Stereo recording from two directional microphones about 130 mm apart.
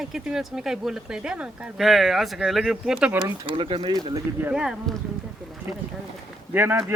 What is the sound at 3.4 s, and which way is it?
Speech, 40° right (ahead or behind).